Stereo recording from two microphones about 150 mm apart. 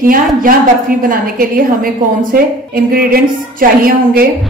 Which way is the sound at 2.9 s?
75° right (ahead or behind).